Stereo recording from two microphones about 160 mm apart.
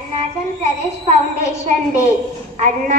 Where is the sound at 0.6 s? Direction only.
45° right (ahead or behind).